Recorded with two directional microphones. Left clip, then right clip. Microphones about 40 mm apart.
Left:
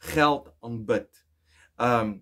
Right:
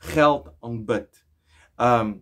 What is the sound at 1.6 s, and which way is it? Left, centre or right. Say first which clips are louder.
Speech: right 4 dB; centre.